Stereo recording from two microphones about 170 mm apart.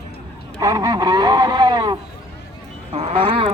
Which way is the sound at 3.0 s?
35° right (ahead or behind).